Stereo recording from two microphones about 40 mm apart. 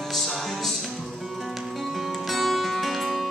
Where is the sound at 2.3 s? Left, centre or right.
Centre.